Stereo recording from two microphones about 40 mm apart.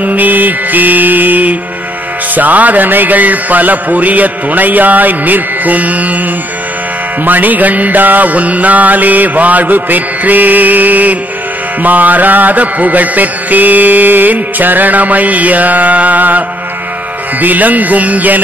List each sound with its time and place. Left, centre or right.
0.0 s mantra: right
7.2 s mantra: right